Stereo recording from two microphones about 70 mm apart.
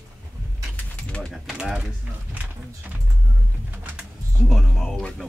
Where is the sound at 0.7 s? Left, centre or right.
Centre.